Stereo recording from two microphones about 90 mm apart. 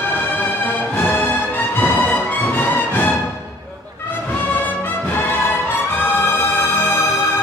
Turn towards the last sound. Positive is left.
turn(degrees=25)  # may be behind; listen again after turning